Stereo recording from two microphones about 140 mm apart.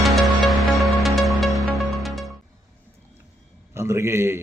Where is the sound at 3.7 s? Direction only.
20° right (ahead or behind).